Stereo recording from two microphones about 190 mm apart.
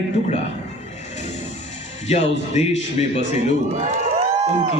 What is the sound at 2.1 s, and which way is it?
Speech, 35° left (ahead or behind).